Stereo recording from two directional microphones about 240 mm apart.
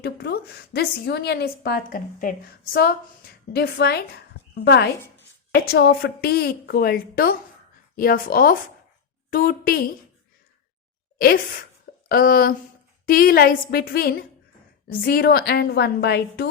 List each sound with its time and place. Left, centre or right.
0.0 s a woman's voice: left
11.2 s a woman's voice: left